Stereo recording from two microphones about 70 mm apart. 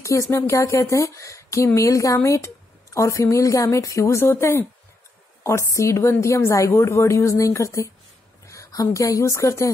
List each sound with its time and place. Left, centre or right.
0.0 s a woman's voice: left